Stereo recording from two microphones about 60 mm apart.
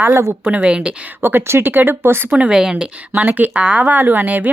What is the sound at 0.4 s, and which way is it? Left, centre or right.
Speech, centre.